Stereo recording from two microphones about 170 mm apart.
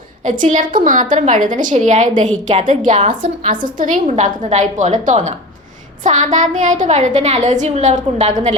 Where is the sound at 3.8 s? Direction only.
50° right (ahead or behind).